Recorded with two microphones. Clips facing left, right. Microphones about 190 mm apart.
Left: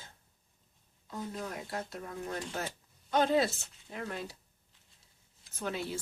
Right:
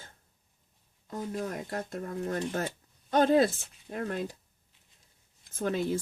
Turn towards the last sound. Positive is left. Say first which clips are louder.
# right 6 dB
turn(degrees=-50)  # may be behind; listen again after turning